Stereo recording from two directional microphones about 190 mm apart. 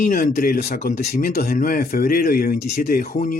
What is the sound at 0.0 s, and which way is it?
Speech, 45° left (ahead or behind).